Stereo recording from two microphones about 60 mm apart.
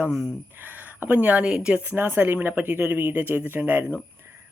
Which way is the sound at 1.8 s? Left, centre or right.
Right.